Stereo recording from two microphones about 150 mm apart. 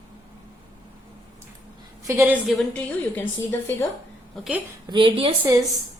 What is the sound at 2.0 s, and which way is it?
Speech, 15° right (ahead or behind).